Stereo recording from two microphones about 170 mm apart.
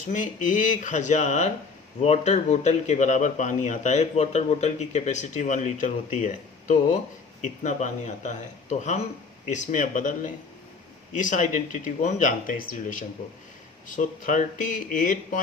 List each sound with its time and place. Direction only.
0.0 s a man's voice: 45° left (ahead or behind)